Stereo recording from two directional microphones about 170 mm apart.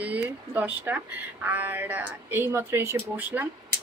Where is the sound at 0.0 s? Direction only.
10° right (ahead or behind).